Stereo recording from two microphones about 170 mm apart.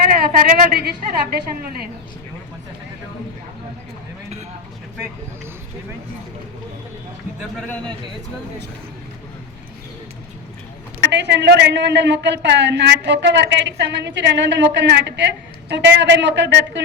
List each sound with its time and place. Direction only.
0.0 s speech: 60° right (ahead or behind)
11.1 s a woman's voice: 90° right